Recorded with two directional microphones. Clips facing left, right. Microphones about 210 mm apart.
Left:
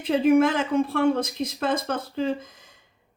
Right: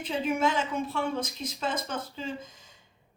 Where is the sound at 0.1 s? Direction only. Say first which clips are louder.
Left 9 dB; 55° left (ahead or behind).